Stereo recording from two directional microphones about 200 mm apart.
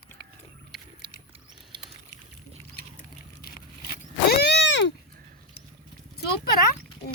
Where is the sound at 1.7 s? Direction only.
25° right (ahead or behind).